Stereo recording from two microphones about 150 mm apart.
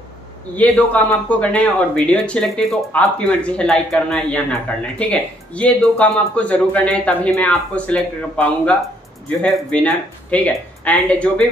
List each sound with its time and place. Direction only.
0.6 s speech: 10° left (ahead or behind)